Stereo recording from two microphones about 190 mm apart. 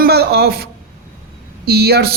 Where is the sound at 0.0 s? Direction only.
60° right (ahead or behind).